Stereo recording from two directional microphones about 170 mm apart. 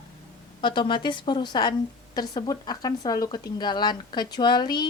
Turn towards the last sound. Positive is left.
turn(degrees=25)  # may be behind; listen again after turning